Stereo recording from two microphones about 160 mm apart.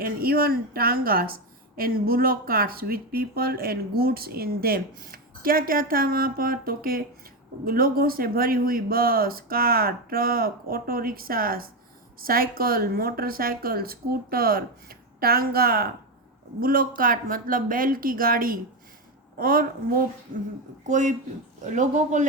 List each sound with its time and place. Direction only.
0.0 s a woman's voice: 65° right (ahead or behind)
20.8 s speech: 50° right (ahead or behind)